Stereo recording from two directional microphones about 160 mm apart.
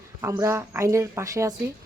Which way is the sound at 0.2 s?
15° right (ahead or behind).